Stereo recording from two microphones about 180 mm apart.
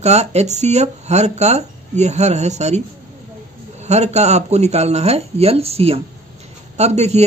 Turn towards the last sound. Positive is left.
turn(degrees=-40)  # may be behind; listen again after turning